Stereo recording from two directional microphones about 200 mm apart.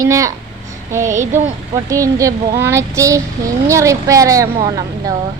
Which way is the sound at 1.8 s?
15° right (ahead or behind).